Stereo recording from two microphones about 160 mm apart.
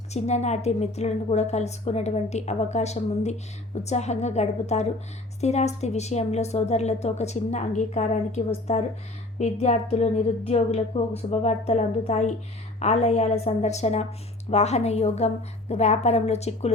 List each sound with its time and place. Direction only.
0.1 s a woman's voice: 45° left (ahead or behind)